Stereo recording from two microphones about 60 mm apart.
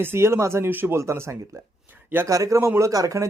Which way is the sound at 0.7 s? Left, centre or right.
Right.